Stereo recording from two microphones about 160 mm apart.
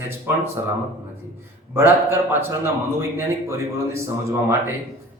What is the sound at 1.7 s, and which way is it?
A man's voice, 15° right (ahead or behind).